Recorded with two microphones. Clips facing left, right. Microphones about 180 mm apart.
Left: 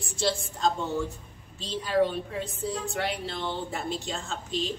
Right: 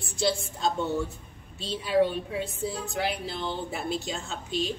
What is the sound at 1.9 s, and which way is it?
Speech, 5° right (ahead or behind).